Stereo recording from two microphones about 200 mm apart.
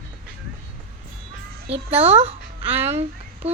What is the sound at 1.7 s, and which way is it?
A child's voice, 30° right (ahead or behind).